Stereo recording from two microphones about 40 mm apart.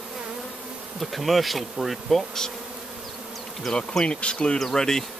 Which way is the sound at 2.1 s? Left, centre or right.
Centre.